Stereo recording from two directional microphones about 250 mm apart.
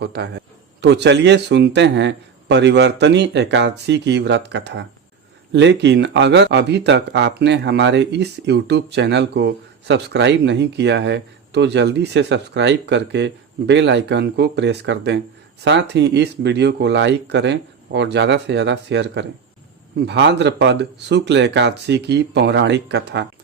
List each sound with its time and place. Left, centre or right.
0.0 s speech: right